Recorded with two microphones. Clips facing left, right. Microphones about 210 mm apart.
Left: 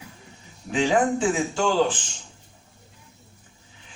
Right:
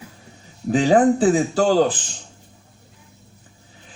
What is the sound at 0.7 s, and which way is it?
Speech, 40° right (ahead or behind).